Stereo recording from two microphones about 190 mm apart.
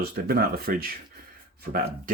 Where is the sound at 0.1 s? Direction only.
55° right (ahead or behind).